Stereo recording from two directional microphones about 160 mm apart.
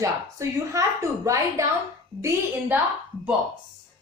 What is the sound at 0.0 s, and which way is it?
A woman's voice, 20° right (ahead or behind).